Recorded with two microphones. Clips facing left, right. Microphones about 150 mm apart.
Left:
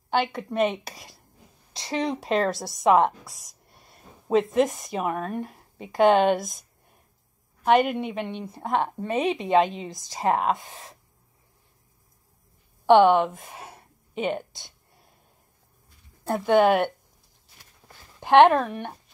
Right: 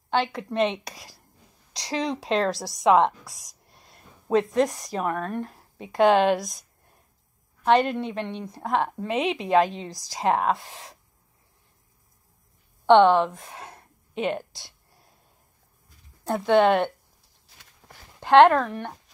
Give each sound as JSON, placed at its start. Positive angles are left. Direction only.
{"t": 0.1, "sound": "a woman's voice", "side_deg": 0}
{"t": 7.6, "sound": "a woman's voice", "side_deg": 5}
{"t": 12.8, "sound": "a sound", "side_deg": 5}
{"t": 16.3, "sound": "a woman's voice", "side_deg": 5}
{"t": 17.8, "sound": "a sound", "side_deg": -20}
{"t": 18.2, "sound": "speech", "side_deg": 15}